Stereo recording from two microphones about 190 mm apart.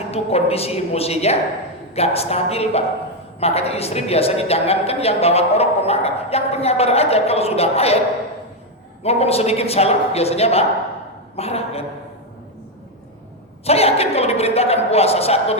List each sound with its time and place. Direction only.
0.1 s speech: 30° left (ahead or behind)
9.0 s speech: 30° left (ahead or behind)
13.7 s speech: 30° left (ahead or behind)